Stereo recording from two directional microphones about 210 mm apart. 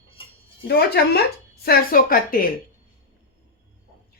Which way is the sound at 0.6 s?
50° left (ahead or behind).